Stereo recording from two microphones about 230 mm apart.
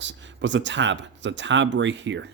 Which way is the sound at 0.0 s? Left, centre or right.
Right.